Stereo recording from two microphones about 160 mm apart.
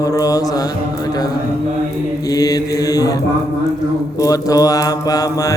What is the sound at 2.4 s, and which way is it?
Mantra, 25° left (ahead or behind).